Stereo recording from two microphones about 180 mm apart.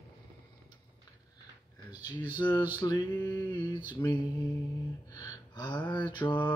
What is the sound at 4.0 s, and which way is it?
Mantra, 15° left (ahead or behind).